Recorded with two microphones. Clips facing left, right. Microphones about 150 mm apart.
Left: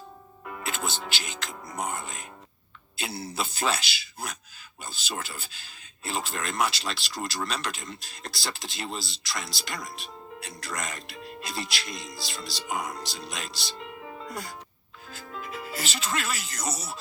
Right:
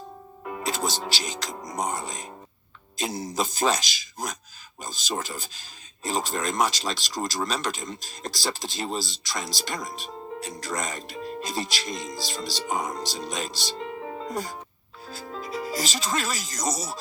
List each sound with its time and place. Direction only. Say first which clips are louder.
0.4 s speech: right 5 dB; 35° right (ahead or behind)